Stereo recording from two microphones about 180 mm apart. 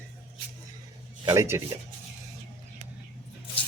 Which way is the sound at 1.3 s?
15° right (ahead or behind).